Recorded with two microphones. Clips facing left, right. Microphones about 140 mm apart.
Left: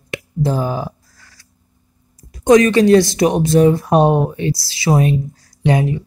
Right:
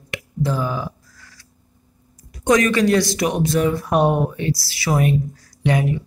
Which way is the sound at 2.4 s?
25° left (ahead or behind).